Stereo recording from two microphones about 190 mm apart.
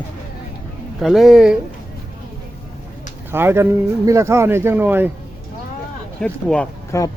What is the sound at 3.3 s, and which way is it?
Speech, 10° right (ahead or behind).